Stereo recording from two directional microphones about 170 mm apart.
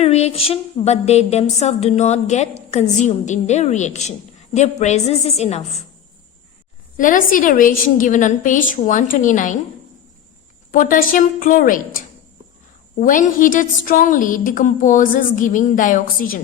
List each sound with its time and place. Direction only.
0.0 s a woman's voice: 40° left (ahead or behind)
6.9 s a woman's voice: 50° left (ahead or behind)
10.7 s a woman's voice: 50° left (ahead or behind)